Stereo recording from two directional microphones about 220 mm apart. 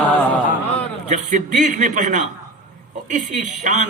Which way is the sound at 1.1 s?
35° right (ahead or behind).